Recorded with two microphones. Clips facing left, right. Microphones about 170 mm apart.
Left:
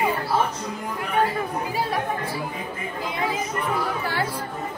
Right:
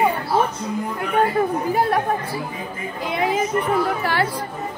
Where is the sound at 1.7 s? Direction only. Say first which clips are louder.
Right 7 dB; 60° right (ahead or behind).